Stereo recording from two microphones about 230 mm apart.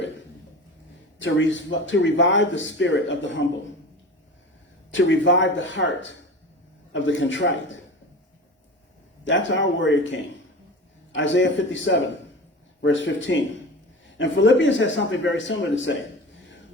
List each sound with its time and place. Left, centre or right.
1.2 s speech: left
4.9 s speech: left
9.2 s speech: left